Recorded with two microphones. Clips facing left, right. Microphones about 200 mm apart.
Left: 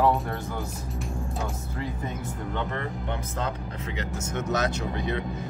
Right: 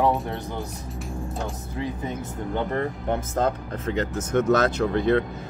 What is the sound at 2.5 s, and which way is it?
Speech, 40° right (ahead or behind).